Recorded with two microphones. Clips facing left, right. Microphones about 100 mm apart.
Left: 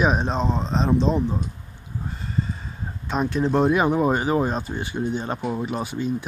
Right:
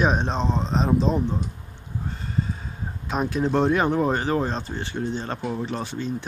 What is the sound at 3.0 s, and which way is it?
Speech, centre (ahead or behind).